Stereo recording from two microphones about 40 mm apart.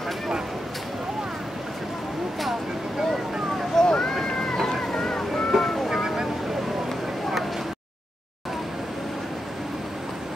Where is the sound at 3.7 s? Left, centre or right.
Centre.